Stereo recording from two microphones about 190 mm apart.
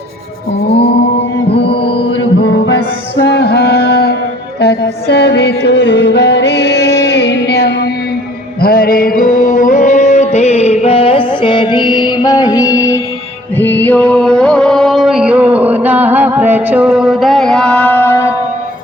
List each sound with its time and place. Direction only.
3.2 s music: 60° left (ahead or behind); by 18.3 s 15° left (ahead or behind)